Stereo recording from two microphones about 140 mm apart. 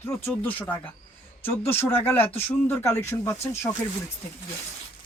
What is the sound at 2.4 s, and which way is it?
Speech, 15° left (ahead or behind).